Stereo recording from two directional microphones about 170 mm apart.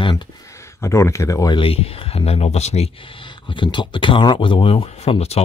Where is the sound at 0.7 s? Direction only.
15° left (ahead or behind).